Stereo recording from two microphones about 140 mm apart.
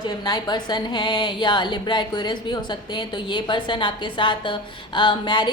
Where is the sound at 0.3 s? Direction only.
30° left (ahead or behind).